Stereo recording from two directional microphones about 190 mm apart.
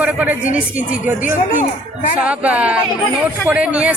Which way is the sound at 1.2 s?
45° left (ahead or behind).